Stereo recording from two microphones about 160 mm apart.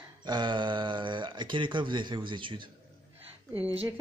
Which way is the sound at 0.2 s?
25° right (ahead or behind).